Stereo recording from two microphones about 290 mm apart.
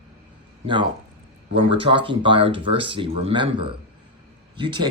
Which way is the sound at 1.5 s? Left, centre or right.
Centre.